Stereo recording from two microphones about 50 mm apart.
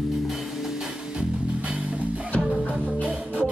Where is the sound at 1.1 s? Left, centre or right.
Right.